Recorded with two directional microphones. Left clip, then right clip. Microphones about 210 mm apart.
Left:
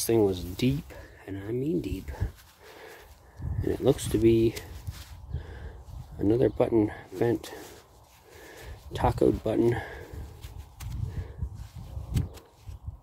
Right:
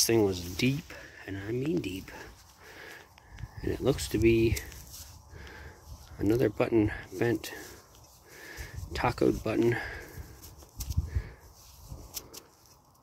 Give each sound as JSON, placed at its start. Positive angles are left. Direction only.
{"t": 0.0, "sound": "speech", "side_deg": 5}
{"t": 3.6, "sound": "speech", "side_deg": 20}
{"t": 6.1, "sound": "speech", "side_deg": 10}
{"t": 8.4, "sound": "a sound", "side_deg": 10}